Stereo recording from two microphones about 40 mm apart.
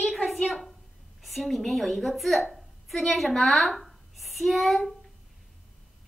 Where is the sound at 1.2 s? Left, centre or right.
Centre.